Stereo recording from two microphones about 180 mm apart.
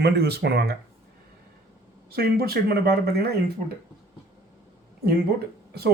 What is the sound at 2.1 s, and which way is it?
Speech, 60° right (ahead or behind).